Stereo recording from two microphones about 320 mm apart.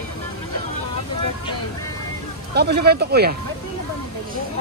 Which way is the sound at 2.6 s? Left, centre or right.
Right.